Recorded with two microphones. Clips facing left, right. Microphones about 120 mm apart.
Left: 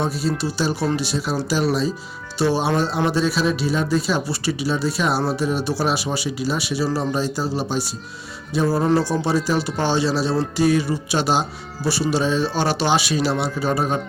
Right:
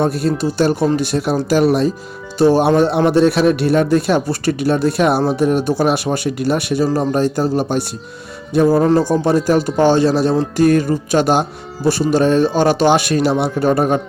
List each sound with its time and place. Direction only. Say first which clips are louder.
0.0 s speech: right 6 dB; 55° right (ahead or behind)